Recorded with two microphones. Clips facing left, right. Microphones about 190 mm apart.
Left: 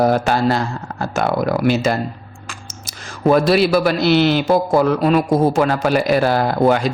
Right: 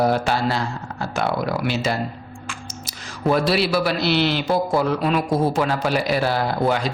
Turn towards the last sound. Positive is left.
turn(degrees=50)  # may be behind; listen again after turning